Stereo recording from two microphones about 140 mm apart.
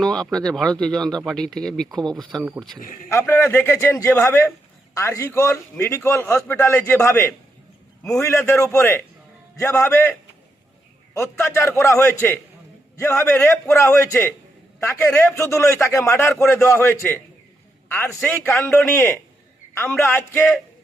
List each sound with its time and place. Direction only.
0.0 s speech: 5° left (ahead or behind)
2.0 s speech: 30° right (ahead or behind)
3.1 s a man's voice: 15° left (ahead or behind)
13.4 s speech: 20° left (ahead or behind)
15.1 s speech: 5° left (ahead or behind)
15.4 s speech: 20° left (ahead or behind)